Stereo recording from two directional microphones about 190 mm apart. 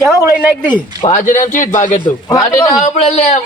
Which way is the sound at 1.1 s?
40° left (ahead or behind).